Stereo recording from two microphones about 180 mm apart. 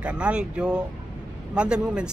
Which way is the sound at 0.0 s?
5° right (ahead or behind).